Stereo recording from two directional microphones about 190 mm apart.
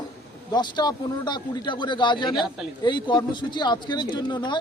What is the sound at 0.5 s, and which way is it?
Speech, 20° left (ahead or behind).